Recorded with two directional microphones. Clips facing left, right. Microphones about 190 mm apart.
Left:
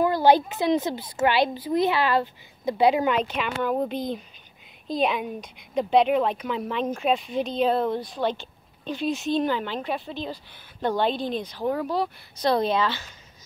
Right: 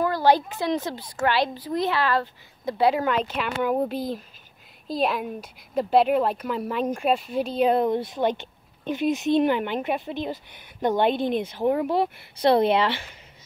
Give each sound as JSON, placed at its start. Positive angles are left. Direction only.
{"t": 0.0, "sound": "a woman's voice", "side_deg": 20}
{"t": 1.2, "sound": "a woman's voice", "side_deg": 0}
{"t": 2.1, "sound": "speech", "side_deg": 20}
{"t": 3.6, "sound": "a woman's voice", "side_deg": -10}
{"t": 11.1, "sound": "speech", "side_deg": -55}
{"t": 11.4, "sound": "a woman's voice", "side_deg": -20}
{"t": 12.6, "sound": "speech", "side_deg": -65}